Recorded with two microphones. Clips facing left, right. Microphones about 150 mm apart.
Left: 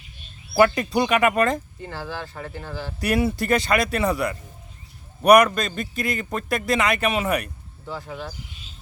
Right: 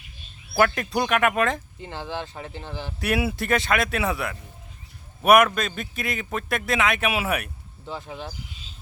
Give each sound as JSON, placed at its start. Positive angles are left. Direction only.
{"t": 0.8, "sound": "a man's voice", "side_deg": 0}
{"t": 1.8, "sound": "speech", "side_deg": -20}
{"t": 3.0, "sound": "a man's voice", "side_deg": -5}
{"t": 7.9, "sound": "speech", "side_deg": -20}